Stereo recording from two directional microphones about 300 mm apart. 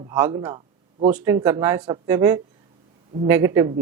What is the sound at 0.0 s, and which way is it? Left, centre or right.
Speech, centre.